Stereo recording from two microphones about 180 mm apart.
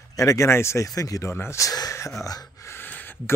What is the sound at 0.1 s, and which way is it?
Speech, 20° left (ahead or behind).